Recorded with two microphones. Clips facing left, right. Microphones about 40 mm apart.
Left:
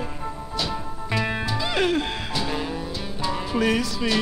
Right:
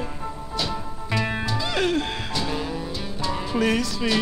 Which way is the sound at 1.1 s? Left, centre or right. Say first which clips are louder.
Even; centre.